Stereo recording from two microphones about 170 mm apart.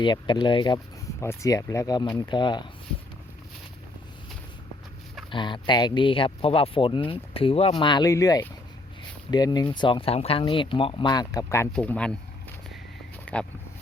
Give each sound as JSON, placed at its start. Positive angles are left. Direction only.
{"t": 0.0, "sound": "speech", "side_deg": 25}
{"t": 1.2, "sound": "speech", "side_deg": 15}
{"t": 5.3, "sound": "speech", "side_deg": 25}
{"t": 11.7, "sound": "a sound", "side_deg": 5}